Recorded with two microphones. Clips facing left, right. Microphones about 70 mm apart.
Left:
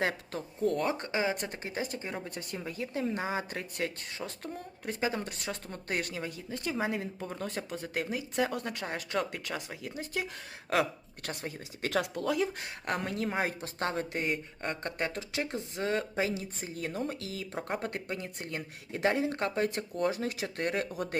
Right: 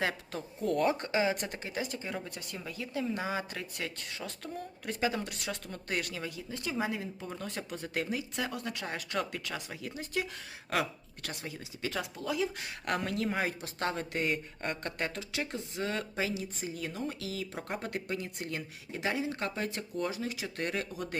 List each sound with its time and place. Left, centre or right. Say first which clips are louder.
0.0 s a woman's voice: left 2 dB; left
8.4 s a woman's voice: left 2 dB; left
10.7 s speech: left 3 dB; left
11.8 s speech: left 5 dB; left
12.5 s a woman's voice: even; left
14.2 s speech: even; centre
14.8 s speech: left 2 dB; left
18.9 s speech: left 5 dB; left